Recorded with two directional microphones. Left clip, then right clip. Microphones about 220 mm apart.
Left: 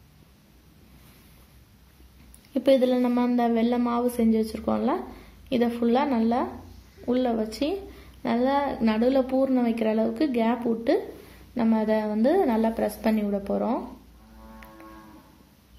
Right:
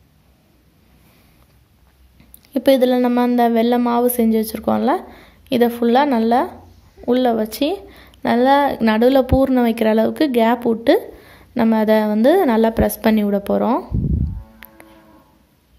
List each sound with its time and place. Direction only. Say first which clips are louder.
2.5 s speech: right 7 dB; 35° right (ahead or behind)
14.6 s music: right 7 dB; 35° right (ahead or behind)